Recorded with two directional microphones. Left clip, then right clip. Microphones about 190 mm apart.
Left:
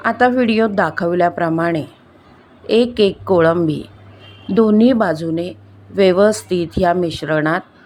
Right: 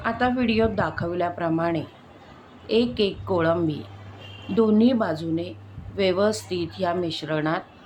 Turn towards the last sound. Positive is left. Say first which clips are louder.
# left 8 dB
turn(degrees=40)  # may be behind; listen again after turning